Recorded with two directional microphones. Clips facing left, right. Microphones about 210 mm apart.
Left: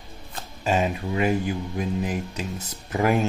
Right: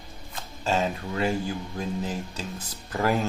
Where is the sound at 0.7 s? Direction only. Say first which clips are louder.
Left 3 dB; 15° left (ahead or behind).